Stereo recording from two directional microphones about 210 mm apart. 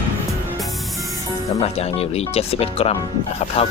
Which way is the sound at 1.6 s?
30° left (ahead or behind).